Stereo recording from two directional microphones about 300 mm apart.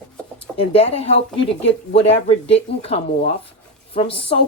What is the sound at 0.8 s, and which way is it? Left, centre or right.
Speech, left.